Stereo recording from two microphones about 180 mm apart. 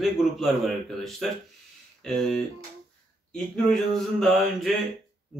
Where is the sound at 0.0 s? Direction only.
Centre (ahead or behind).